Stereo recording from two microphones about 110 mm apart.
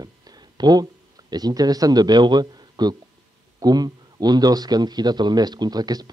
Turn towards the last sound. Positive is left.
turn(degrees=-35)  # may be behind; listen again after turning